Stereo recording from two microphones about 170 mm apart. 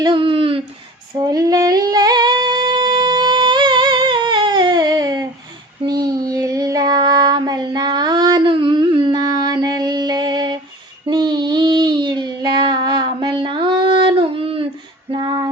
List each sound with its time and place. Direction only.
0.0 s speech: 30° right (ahead or behind)
1.1 s humming: 20° right (ahead or behind)
5.8 s child singing: 25° right (ahead or behind)
15.1 s female singing: 25° right (ahead or behind)